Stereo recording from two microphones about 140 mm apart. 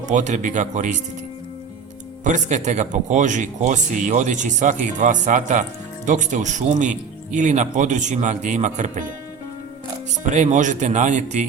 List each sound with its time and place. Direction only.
0.1 s speech: 60° right (ahead or behind)
2.2 s speech: 60° right (ahead or behind)
10.2 s speech: 60° right (ahead or behind)